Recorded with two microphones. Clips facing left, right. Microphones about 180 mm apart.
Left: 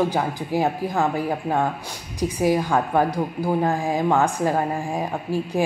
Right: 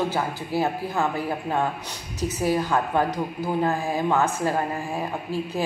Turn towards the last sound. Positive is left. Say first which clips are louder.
# left 4 dB
turn(degrees=15)  # may be behind; listen again after turning